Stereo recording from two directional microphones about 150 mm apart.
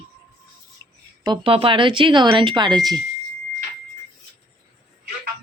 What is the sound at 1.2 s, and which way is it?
Speech, 35° right (ahead or behind).